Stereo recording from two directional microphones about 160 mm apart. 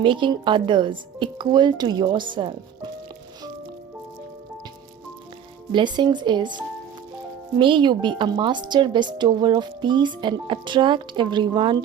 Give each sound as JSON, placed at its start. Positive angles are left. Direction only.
{"t": 0.0, "sound": "a woman's voice", "side_deg": -30}
{"t": 5.7, "sound": "a woman's voice", "side_deg": -30}
{"t": 7.6, "sound": "a woman's voice", "side_deg": -30}